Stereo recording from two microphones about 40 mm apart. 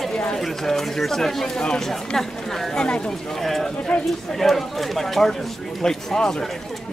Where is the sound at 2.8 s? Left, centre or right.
Left.